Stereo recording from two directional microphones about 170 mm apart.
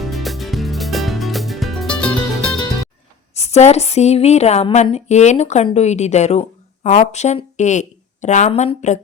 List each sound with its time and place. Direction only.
0.0 s music: centre (ahead or behind)
3.3 s a woman's voice: 40° left (ahead or behind)